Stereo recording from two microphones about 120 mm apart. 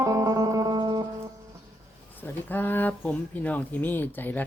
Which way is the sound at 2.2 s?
15° left (ahead or behind).